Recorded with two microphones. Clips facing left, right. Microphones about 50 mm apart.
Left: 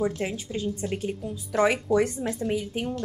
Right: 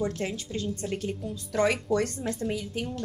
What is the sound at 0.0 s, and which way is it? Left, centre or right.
A woman's voice, centre.